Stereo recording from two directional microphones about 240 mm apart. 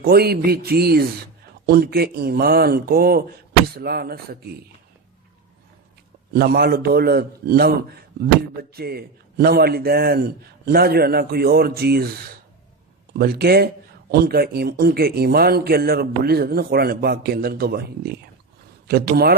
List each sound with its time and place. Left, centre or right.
0.0 s a man's voice: right
6.3 s a man's voice: right
8.7 s a man's voice: right
13.1 s a man's voice: right